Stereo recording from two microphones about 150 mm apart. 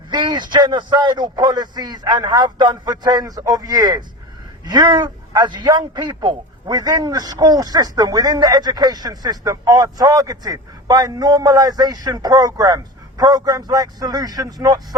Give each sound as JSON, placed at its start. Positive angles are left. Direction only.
{"t": 0.1, "sound": "a man's voice", "side_deg": -30}